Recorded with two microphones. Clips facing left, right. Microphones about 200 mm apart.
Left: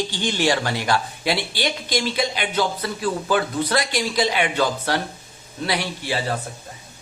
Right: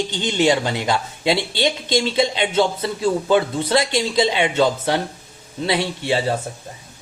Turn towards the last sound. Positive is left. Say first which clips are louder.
# right 5 dB
turn(degrees=-25)  # may be behind; listen again after turning